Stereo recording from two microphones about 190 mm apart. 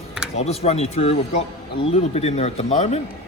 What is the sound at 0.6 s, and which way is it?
Speech, 35° left (ahead or behind).